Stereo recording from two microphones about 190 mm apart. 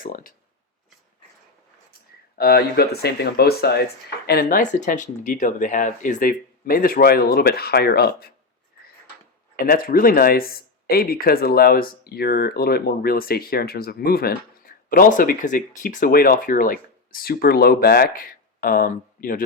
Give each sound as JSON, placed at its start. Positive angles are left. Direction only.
{"t": 0.0, "sound": "speech", "side_deg": 50}
{"t": 2.4, "sound": "speech", "side_deg": 55}
{"t": 9.6, "sound": "speech", "side_deg": 50}